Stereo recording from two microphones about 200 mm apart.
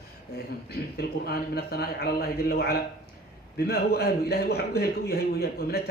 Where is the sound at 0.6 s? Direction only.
50° left (ahead or behind).